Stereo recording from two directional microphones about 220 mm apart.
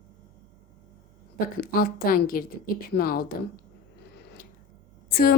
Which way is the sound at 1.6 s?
40° left (ahead or behind).